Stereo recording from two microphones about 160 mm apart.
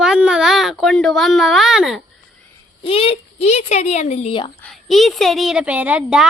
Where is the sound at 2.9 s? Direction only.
35° left (ahead or behind).